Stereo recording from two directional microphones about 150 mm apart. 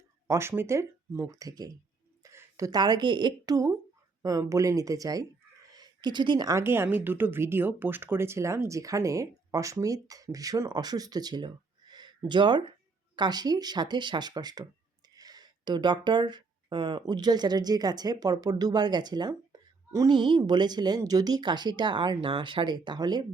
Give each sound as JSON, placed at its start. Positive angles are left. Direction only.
{"t": 0.3, "sound": "speech", "side_deg": -15}